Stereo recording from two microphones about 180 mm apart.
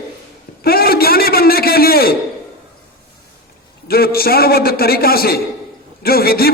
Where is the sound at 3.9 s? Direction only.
55° left (ahead or behind).